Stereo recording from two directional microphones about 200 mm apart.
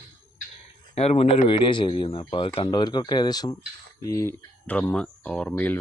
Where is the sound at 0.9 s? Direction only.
30° left (ahead or behind); by 5.8 s 10° left (ahead or behind).